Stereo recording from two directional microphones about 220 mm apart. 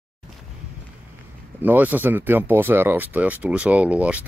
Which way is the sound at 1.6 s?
10° right (ahead or behind).